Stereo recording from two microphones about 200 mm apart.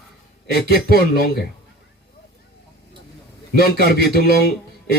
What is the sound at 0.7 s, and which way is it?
Speech, 50° left (ahead or behind).